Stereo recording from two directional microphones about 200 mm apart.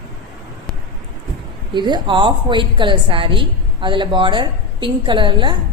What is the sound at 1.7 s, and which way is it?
A woman's voice, 20° right (ahead or behind).